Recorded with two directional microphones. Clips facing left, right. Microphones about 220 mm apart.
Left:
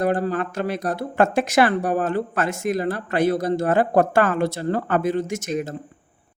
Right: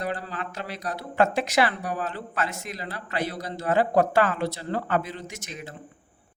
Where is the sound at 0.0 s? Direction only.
50° left (ahead or behind).